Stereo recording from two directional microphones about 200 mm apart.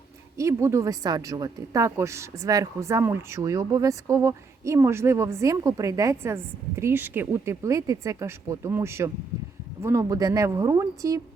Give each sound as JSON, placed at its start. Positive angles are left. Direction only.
{"t": 0.3, "sound": "a woman's voice", "side_deg": -15}